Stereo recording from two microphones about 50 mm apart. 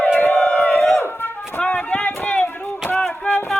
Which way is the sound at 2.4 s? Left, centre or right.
Left.